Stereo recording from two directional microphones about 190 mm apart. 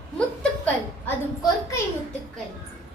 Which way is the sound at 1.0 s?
20° left (ahead or behind).